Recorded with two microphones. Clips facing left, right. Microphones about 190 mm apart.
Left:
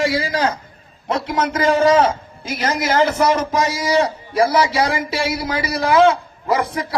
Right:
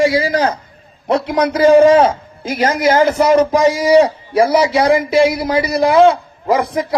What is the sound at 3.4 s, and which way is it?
A man's voice, 60° right (ahead or behind).